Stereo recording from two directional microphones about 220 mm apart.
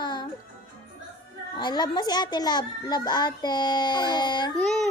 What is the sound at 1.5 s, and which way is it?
A child's voice, 20° left (ahead or behind).